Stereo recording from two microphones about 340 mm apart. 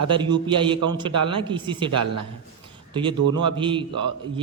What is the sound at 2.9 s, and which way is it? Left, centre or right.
Speech, centre.